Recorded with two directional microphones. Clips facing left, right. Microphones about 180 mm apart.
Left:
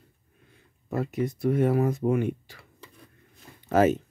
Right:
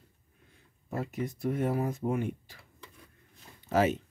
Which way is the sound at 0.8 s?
80° left.